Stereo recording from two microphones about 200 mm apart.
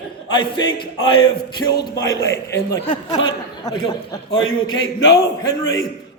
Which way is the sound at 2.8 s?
25° left (ahead or behind).